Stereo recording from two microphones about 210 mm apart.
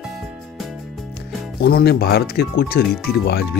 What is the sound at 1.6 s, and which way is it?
Speech, 50° left (ahead or behind).